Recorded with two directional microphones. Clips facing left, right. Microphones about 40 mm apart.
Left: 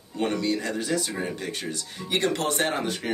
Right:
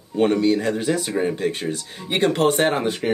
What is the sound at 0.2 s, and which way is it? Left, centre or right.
Speech, right.